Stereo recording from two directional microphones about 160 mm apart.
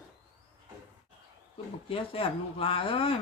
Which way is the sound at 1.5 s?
35° left (ahead or behind).